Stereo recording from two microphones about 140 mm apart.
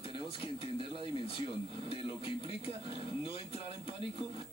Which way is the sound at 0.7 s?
40° left (ahead or behind).